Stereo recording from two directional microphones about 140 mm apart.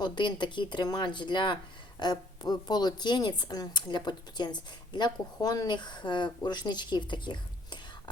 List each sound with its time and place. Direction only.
0.0 s speech: 35° left (ahead or behind)